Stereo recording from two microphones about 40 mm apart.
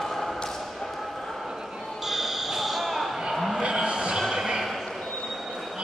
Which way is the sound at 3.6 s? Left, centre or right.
Centre.